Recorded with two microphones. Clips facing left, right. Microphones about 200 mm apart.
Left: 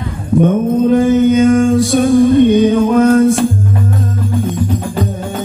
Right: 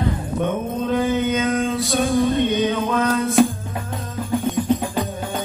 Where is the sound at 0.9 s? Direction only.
45° left (ahead or behind).